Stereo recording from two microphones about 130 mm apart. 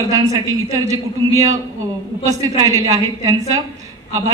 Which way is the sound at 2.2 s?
25° right (ahead or behind).